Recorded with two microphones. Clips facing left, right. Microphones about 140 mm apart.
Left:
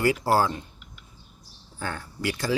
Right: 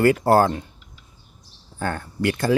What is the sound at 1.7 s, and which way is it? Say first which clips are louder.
Speech: right 7 dB; 50° right (ahead or behind).